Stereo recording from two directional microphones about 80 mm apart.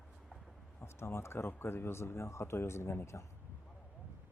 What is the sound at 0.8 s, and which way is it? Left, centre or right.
Speech, left.